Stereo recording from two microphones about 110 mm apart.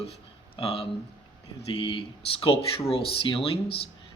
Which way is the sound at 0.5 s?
55° left (ahead or behind).